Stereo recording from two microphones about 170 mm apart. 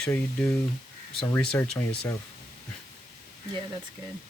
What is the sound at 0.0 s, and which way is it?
Speech, 5° left (ahead or behind).